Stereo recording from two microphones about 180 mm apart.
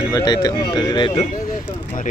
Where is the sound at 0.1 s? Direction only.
20° left (ahead or behind).